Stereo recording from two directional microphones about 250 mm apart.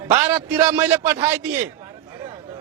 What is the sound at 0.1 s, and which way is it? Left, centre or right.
Speech, centre.